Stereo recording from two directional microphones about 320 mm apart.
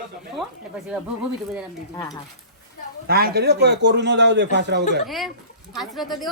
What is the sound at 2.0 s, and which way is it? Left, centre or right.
Speech, centre.